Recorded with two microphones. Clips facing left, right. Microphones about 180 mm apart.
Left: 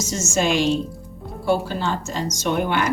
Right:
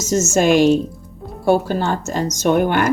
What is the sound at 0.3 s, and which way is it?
Speech, 45° right (ahead or behind).